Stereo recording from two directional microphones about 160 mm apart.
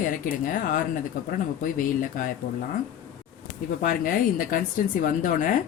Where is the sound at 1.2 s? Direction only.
55° left (ahead or behind).